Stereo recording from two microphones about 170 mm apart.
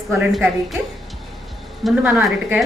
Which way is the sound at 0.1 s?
Centre (ahead or behind).